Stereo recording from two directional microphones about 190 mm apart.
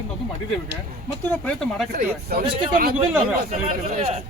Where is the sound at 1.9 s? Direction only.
50° right (ahead or behind).